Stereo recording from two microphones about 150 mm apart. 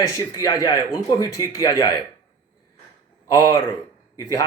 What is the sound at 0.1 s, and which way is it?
Speech, 20° left (ahead or behind).